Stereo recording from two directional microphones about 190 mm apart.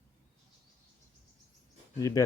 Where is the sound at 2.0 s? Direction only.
20° left (ahead or behind).